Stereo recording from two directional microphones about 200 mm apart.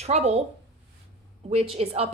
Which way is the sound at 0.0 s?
30° right (ahead or behind).